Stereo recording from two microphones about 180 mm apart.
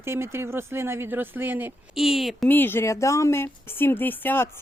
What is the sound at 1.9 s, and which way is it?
Speech, centre (ahead or behind).